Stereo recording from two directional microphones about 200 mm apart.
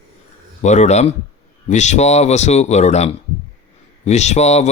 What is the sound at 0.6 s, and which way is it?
Speech, 35° left (ahead or behind).